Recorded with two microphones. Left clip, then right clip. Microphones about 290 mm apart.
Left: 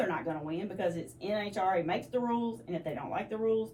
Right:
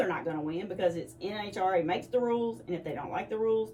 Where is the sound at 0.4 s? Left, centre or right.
Centre.